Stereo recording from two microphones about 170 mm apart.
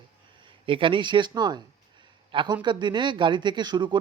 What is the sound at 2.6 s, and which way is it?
Speech, 25° right (ahead or behind).